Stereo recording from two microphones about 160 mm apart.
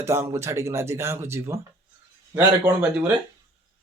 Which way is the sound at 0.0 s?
15° right (ahead or behind).